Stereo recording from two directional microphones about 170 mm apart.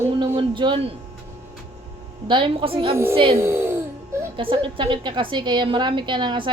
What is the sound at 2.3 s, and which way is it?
Speech, 30° right (ahead or behind).